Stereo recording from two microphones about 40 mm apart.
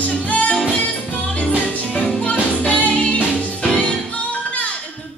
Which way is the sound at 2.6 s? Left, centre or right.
Left.